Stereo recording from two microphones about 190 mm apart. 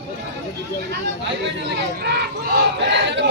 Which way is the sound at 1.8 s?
60° right (ahead or behind).